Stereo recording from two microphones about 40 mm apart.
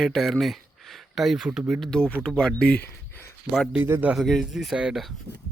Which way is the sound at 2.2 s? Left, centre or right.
Centre.